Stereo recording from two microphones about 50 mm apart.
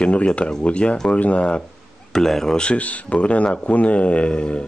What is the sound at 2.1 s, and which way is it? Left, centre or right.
Speech, centre.